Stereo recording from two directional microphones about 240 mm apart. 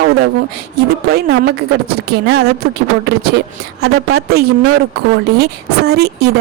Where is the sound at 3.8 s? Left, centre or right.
Right.